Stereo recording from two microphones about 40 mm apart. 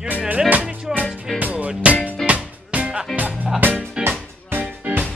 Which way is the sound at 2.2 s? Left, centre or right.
Centre.